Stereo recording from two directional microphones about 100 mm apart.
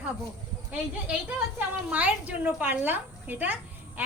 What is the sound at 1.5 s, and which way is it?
A woman's voice, 15° right (ahead or behind).